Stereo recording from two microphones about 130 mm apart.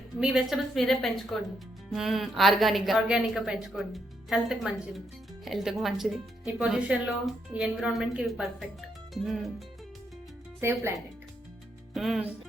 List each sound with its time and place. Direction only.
0.2 s a woman's voice: 5° right (ahead or behind)
10.6 s speech: 20° right (ahead or behind)
11.9 s a woman's voice: centre (ahead or behind)